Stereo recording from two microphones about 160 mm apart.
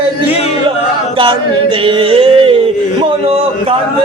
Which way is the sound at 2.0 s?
35° right (ahead or behind).